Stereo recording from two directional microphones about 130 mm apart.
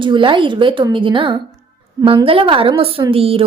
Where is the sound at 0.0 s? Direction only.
40° right (ahead or behind).